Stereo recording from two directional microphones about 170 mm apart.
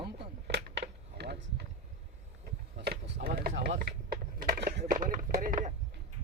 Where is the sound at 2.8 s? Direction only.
70° right (ahead or behind); by 5.7 s 50° right (ahead or behind).